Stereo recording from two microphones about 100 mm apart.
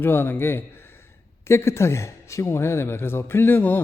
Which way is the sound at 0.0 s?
20° left (ahead or behind).